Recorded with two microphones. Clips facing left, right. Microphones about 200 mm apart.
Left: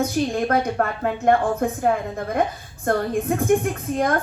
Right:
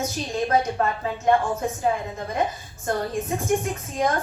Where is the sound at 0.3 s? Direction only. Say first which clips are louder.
Right 2 dB; 60° left (ahead or behind).